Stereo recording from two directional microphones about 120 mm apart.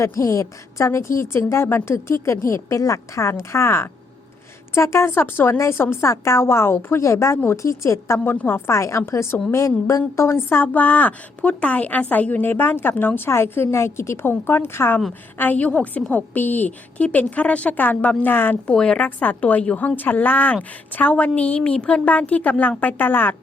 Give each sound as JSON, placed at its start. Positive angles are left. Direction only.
{"t": 0.0, "sound": "a woman's voice", "side_deg": 25}